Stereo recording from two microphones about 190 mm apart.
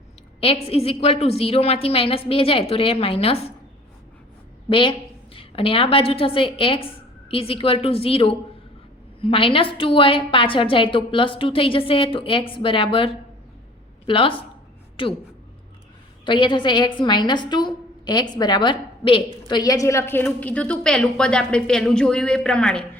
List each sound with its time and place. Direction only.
0.3 s a woman's voice: 30° left (ahead or behind)
4.7 s a woman's voice: 25° left (ahead or behind)
14.1 s a woman's voice: 30° left (ahead or behind)
16.2 s a woman's voice: 25° left (ahead or behind); by 22.9 s 5° left (ahead or behind)